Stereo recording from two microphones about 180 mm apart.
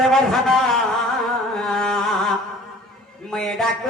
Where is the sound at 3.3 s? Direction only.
Centre (ahead or behind).